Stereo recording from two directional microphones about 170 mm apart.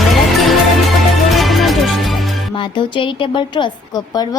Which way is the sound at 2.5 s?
30° left (ahead or behind).